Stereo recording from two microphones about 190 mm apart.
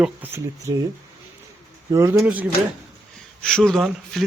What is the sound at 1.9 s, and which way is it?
Speech, 15° right (ahead or behind).